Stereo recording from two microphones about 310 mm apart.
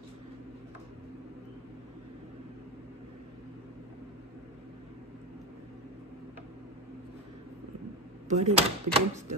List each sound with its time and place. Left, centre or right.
8.3 s speech: right